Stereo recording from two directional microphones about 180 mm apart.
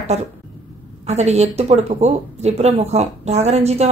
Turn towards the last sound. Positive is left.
turn(degrees=-35)  # may be behind; listen again after turning